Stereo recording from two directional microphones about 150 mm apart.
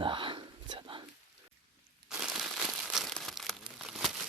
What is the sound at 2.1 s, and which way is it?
Crumpling, centre (ahead or behind).